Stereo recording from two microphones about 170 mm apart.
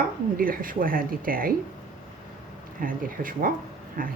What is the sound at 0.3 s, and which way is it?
Speech, 55° right (ahead or behind).